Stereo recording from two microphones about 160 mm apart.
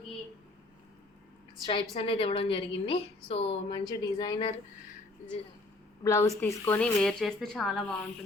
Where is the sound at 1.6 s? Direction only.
30° left (ahead or behind).